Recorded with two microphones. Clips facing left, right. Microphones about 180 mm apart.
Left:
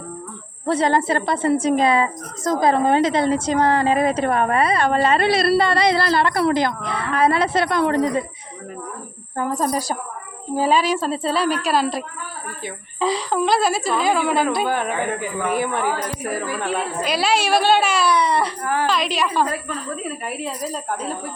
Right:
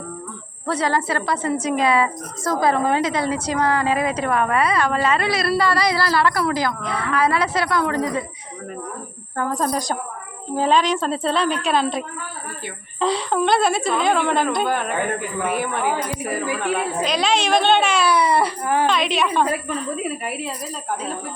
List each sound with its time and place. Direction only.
0.6 s a woman's voice: 25° left (ahead or behind)
9.4 s a woman's voice: 10° left (ahead or behind)
15.8 s a woman's voice: 10° right (ahead or behind)
17.0 s a woman's voice: 5° left (ahead or behind)
18.6 s a woman's voice: 20° right (ahead or behind)
18.9 s a woman's voice: centre (ahead or behind)
19.5 s a woman's voice: 10° right (ahead or behind)